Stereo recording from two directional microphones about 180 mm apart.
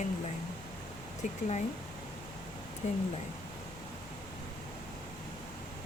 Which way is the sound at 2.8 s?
40° left (ahead or behind).